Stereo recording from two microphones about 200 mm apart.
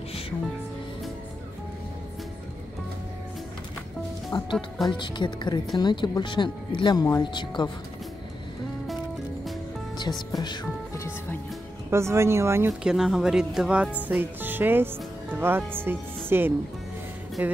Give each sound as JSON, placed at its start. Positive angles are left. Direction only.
{"t": 4.3, "sound": "speech", "side_deg": 25}
{"t": 10.3, "sound": "speech", "side_deg": 20}
{"t": 11.9, "sound": "speech", "side_deg": -15}
{"t": 12.9, "sound": "speech", "side_deg": 0}